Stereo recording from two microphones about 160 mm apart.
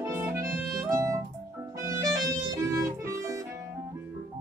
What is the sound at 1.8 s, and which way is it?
Music, 20° right (ahead or behind).